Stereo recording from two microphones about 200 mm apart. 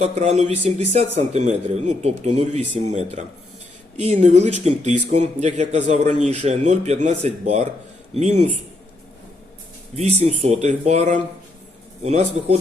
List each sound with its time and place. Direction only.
0.0 s a man's voice: 35° right (ahead or behind)
9.9 s a man's voice: 35° right (ahead or behind)